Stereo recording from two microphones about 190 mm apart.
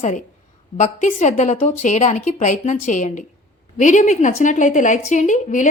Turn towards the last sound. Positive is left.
turn(degrees=40)  # may be behind; listen again after turning